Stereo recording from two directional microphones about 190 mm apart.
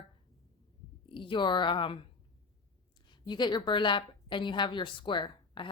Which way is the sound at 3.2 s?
25° left (ahead or behind).